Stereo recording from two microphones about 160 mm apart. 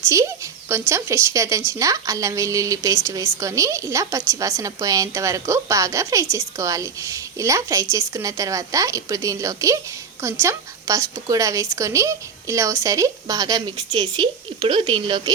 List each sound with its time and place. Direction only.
0.1 s speech: 20° right (ahead or behind)